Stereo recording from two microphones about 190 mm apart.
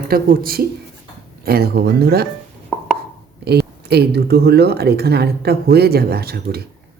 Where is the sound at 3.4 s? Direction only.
60° right (ahead or behind).